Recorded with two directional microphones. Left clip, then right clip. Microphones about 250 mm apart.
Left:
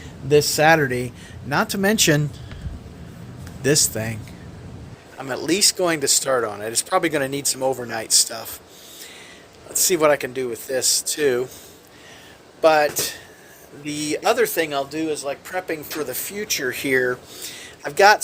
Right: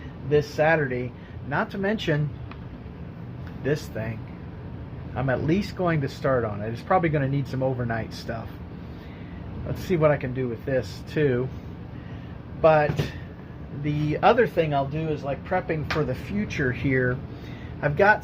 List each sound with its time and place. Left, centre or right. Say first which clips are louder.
0.3 s speech: left 6 dB; left
3.6 s speech: left 8 dB; left
5.5 s speech: left 6 dB; left
9.9 s speech: left 4 dB; left
12.6 s speech: left 3 dB; left